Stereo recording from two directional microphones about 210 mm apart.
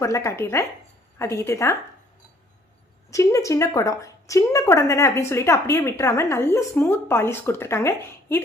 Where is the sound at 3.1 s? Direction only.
15° left (ahead or behind).